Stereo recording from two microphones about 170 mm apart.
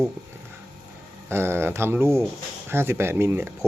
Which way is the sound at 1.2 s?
15° right (ahead or behind).